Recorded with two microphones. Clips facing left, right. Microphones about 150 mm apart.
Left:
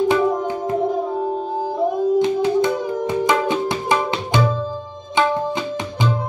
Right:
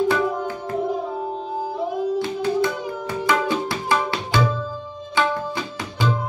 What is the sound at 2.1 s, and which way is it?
Music, 20° left (ahead or behind).